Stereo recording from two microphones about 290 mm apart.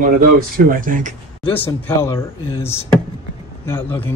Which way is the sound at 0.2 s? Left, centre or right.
Right.